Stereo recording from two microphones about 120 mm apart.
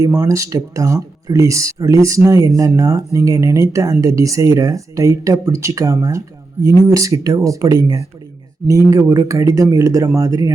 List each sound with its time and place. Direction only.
0.0 s speech: 25° right (ahead or behind)